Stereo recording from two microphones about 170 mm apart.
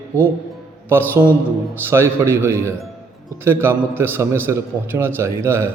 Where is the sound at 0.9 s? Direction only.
10° right (ahead or behind).